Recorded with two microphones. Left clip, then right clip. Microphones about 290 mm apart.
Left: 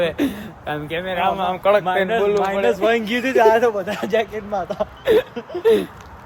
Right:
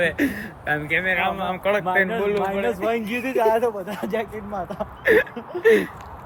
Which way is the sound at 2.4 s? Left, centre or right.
Left.